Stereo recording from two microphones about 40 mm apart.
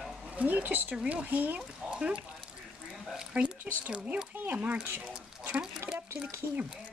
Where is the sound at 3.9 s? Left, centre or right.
Right.